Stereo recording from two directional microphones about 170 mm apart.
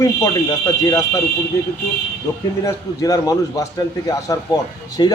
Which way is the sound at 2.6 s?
20° left (ahead or behind).